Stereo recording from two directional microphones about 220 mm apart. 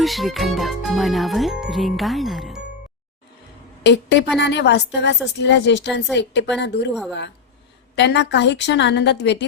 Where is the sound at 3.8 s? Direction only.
50° left (ahead or behind).